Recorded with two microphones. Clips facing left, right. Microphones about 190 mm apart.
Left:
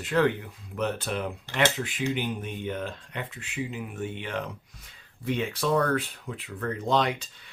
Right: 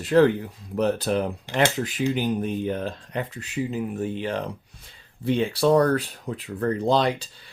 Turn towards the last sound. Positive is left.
turn(degrees=-35)  # may be behind; listen again after turning